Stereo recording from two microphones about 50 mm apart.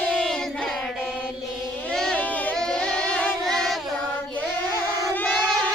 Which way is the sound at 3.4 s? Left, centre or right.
Centre.